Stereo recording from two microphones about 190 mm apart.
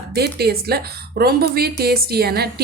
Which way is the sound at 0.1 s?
55° right (ahead or behind).